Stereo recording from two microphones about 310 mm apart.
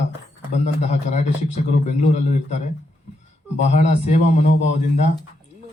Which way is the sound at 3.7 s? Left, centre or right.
Left.